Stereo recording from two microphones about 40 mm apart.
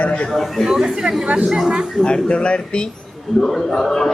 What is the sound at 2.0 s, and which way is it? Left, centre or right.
Speech, left.